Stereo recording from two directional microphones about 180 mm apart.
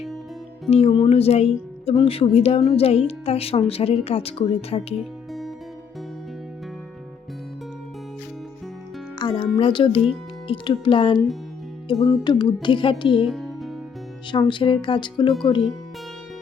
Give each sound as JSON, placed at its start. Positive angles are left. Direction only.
{"t": 0.7, "sound": "speech", "side_deg": 30}
{"t": 4.9, "sound": "music", "side_deg": 0}
{"t": 9.1, "sound": "music", "side_deg": 25}
{"t": 10.5, "sound": "speech", "side_deg": 30}
{"t": 13.2, "sound": "music", "side_deg": 0}
{"t": 14.3, "sound": "speech", "side_deg": 25}